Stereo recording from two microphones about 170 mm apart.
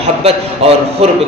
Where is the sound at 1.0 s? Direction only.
35° right (ahead or behind).